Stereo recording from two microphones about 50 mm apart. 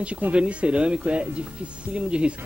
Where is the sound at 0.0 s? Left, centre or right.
Right.